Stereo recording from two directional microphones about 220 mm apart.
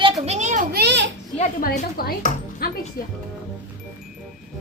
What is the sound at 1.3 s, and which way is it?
Speech, 35° left (ahead or behind).